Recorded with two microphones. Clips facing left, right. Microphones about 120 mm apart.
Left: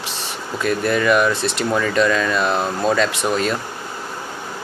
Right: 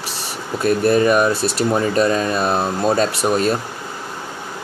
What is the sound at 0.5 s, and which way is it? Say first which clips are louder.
Speech: right 4 dB; 30° right (ahead or behind).